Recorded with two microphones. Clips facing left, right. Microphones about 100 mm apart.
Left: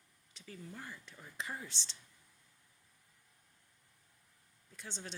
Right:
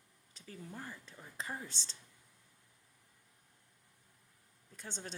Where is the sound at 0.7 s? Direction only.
20° right (ahead or behind).